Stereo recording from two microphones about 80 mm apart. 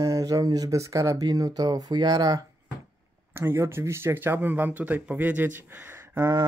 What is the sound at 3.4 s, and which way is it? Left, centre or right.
Speech, right.